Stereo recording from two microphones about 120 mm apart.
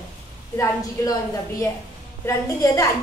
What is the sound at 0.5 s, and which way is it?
A woman's voice, 30° left (ahead or behind).